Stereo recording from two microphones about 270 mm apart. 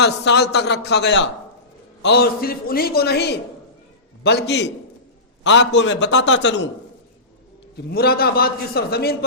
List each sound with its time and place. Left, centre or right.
0.0 s a man's voice: left
7.8 s a man's voice: left